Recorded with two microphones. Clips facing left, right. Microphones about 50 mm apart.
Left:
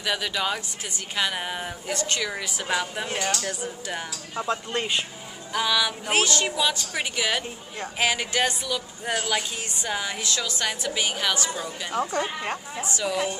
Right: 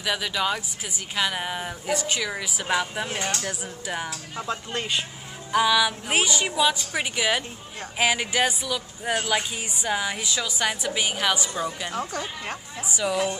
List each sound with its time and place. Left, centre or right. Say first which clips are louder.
0.0 s speech: right 1 dB; centre
3.2 s speech: left 4 dB; right
3.4 s speech: left 1 dB; centre
4.4 s speech: left 3 dB; centre
5.5 s a woman's voice: right 4 dB; centre
11.9 s speech: left 4 dB; centre
12.8 s speech: right 2 dB; centre